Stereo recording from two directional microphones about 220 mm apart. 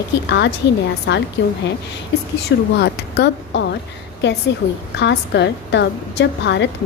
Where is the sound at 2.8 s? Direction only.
50° left (ahead or behind).